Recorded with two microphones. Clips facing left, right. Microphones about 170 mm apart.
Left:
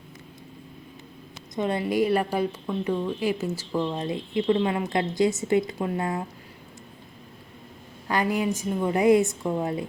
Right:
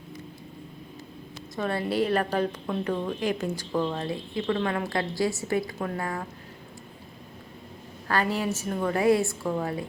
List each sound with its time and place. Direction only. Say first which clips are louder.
1.5 s a woman's voice: left 2 dB; 20° left (ahead or behind)
3.9 s a woman's voice: left 3 dB; 20° left (ahead or behind)
8.0 s speech: left 2 dB; 15° left (ahead or behind)